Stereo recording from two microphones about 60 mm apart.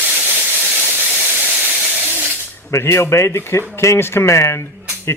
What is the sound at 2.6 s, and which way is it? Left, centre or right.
Speech, left.